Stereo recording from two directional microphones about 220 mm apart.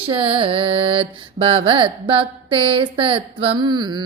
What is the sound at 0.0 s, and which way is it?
Mantra, 25° right (ahead or behind).